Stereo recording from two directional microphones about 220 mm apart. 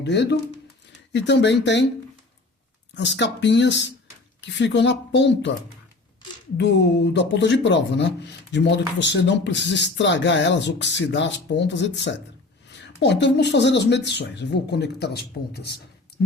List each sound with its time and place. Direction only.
0.0 s speech: 50° left (ahead or behind)
2.9 s speech: 55° left (ahead or behind)
6.6 s speech: 50° left (ahead or behind)